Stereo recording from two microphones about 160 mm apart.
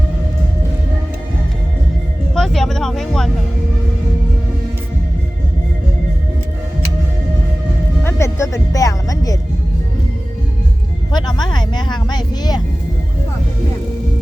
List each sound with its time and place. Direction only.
2.3 s a sound: centre (ahead or behind)
8.0 s music: 15° left (ahead or behind)
11.1 s vehicle: 25° left (ahead or behind)